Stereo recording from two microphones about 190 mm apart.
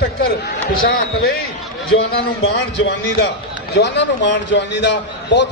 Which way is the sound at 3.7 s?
65° left (ahead or behind).